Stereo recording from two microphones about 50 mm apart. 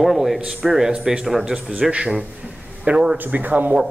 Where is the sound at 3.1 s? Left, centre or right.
Right.